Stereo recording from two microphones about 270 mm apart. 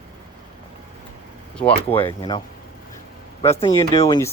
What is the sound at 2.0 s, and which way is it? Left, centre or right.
Speech, centre.